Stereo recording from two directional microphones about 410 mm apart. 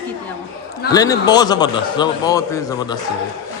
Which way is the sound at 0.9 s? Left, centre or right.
Centre.